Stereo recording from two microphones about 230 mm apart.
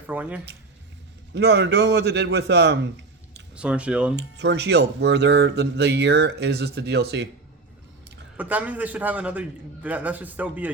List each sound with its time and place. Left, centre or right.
0.1 s a man's voice: centre
1.3 s speech: right
3.5 s speech: centre
4.4 s speech: right
8.4 s a man's voice: centre